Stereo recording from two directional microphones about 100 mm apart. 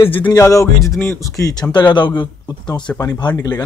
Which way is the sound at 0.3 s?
30° left (ahead or behind).